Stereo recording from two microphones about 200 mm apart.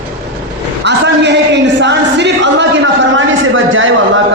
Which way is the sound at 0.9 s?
60° right (ahead or behind).